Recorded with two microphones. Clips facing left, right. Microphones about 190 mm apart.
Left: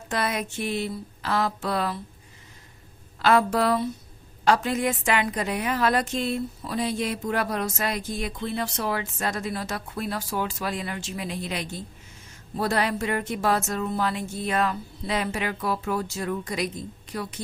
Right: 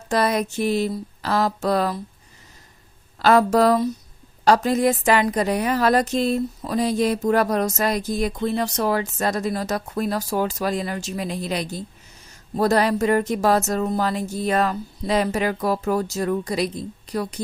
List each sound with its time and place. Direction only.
0.1 s a woman's voice: 40° right (ahead or behind)
3.2 s a woman's voice: 40° right (ahead or behind)